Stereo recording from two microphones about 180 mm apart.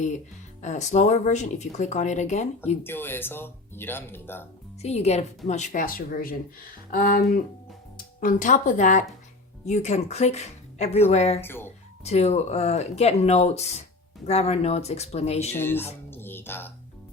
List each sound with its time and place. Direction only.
0.6 s speech: 40° left (ahead or behind)
2.8 s speech: 10° left (ahead or behind)
4.8 s speech: 35° left (ahead or behind)
11.3 s speech: 10° left (ahead or behind)
12.0 s speech: 35° left (ahead or behind)
15.5 s speech: 10° left (ahead or behind)
16.0 s music: 10° left (ahead or behind)